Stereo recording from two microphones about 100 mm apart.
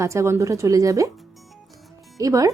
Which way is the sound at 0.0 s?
30° right (ahead or behind).